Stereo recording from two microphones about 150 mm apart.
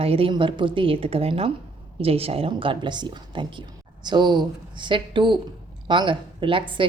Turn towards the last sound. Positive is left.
turn(degrees=-35)  # may be behind; listen again after turning